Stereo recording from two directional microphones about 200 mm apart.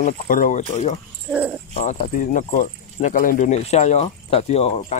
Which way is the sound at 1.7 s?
40° left (ahead or behind).